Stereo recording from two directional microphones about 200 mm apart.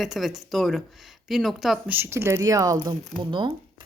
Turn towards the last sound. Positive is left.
turn(degrees=-20)  # may be behind; listen again after turning